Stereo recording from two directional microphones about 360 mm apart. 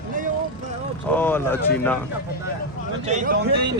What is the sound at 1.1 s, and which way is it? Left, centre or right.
Speech, centre.